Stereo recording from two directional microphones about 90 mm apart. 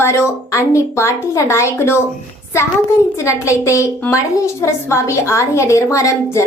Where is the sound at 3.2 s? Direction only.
35° left (ahead or behind).